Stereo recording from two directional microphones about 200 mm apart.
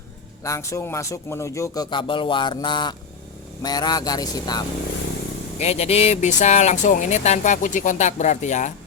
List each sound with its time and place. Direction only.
0.4 s speech: 15° left (ahead or behind)
5.5 s speech: 30° left (ahead or behind)